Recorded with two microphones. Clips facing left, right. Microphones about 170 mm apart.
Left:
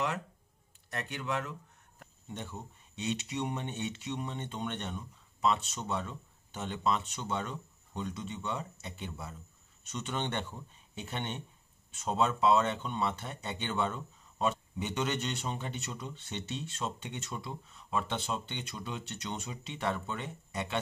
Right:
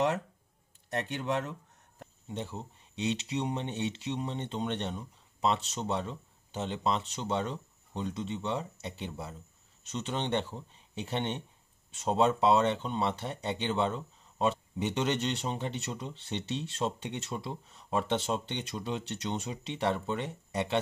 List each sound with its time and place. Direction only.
0.9 s speech: 35° right (ahead or behind)